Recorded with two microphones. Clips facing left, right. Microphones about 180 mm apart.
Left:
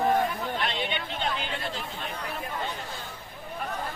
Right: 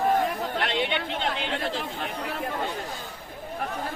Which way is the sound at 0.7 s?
90° right.